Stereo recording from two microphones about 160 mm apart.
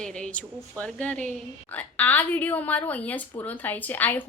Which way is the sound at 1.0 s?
10° left (ahead or behind).